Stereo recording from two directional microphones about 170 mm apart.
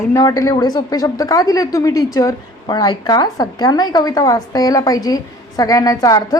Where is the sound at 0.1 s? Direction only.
20° left (ahead or behind).